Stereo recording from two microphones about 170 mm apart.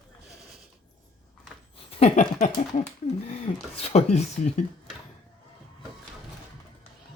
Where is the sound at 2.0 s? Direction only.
40° left (ahead or behind).